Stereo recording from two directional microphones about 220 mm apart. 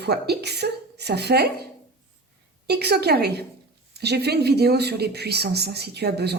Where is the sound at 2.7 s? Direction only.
50° right (ahead or behind).